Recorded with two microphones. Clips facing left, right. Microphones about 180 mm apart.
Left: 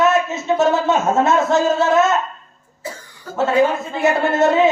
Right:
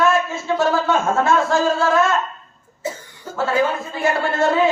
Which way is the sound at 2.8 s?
25° right (ahead or behind).